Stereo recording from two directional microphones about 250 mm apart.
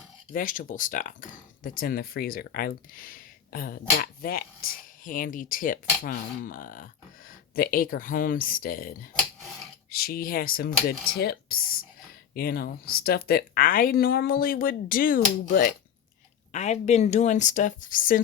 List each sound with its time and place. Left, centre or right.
0.3 s speech: left